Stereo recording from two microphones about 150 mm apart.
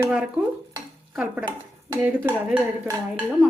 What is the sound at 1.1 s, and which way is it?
Speech, 5° right (ahead or behind).